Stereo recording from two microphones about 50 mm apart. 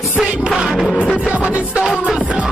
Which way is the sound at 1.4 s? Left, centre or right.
Right.